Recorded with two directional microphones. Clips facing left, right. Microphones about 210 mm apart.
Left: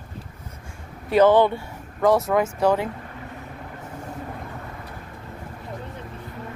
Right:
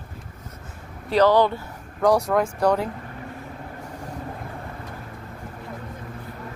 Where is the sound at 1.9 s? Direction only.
Centre (ahead or behind).